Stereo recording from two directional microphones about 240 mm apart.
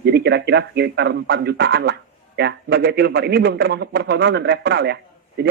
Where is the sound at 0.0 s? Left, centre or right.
Right.